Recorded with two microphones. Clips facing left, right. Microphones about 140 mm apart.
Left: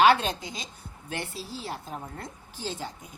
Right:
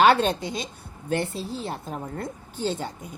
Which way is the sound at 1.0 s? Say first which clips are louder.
Right 9 dB; 50° right (ahead or behind).